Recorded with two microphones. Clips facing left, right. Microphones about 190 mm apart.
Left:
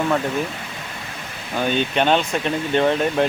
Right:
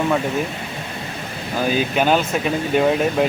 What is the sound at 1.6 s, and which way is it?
Speech, 5° right (ahead or behind).